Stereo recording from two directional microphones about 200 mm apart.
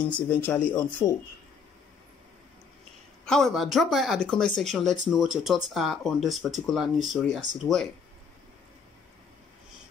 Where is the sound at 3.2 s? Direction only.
Centre (ahead or behind).